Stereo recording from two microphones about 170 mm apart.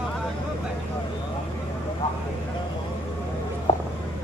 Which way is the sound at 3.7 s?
35° left (ahead or behind).